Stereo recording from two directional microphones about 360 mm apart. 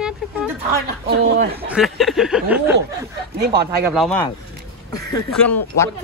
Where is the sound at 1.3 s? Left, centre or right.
Right.